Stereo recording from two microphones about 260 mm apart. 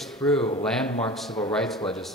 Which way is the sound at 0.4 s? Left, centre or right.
Left.